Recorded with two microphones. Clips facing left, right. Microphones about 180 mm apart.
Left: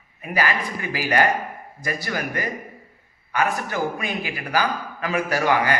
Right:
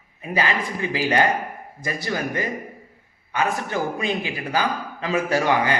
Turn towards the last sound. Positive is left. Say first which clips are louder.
# right 1 dB
turn(degrees=-25)  # may be behind; listen again after turning